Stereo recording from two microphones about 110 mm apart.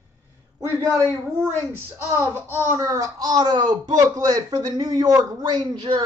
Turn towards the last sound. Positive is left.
turn(degrees=-40)  # may be behind; listen again after turning